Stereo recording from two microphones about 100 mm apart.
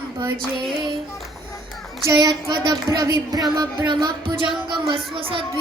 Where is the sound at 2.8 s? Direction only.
35° right (ahead or behind).